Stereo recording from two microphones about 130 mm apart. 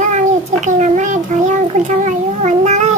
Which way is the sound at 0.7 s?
70° right (ahead or behind).